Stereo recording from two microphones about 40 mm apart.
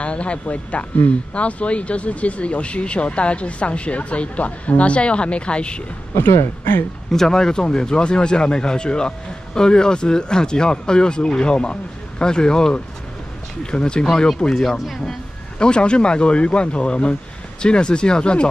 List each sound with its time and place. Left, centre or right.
0.0 s speech: left
6.1 s speech: left
7.1 s speech: centre
14.5 s speech: centre
15.6 s speech: left